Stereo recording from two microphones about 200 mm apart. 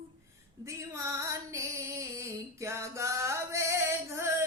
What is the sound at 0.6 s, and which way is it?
Female singing, 15° right (ahead or behind).